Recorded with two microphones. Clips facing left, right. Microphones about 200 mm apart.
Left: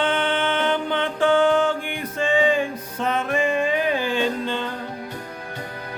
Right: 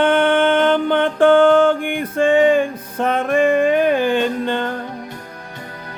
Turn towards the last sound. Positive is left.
turn(degrees=-55)  # may be behind; listen again after turning